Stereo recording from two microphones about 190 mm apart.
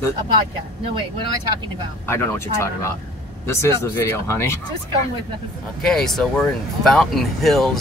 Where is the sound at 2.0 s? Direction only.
10° left (ahead or behind).